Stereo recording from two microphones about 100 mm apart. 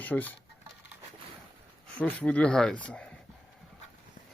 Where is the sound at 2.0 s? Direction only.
15° left (ahead or behind).